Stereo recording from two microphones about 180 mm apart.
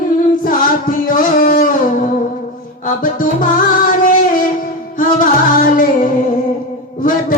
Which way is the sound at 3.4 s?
50° left (ahead or behind).